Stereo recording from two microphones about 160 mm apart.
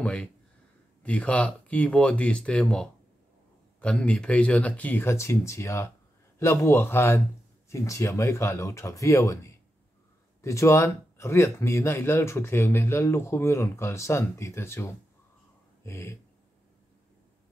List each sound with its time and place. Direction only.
0.0 s speech: 5° left (ahead or behind)